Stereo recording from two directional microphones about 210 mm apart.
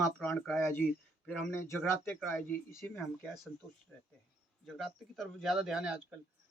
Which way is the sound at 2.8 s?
Centre (ahead or behind).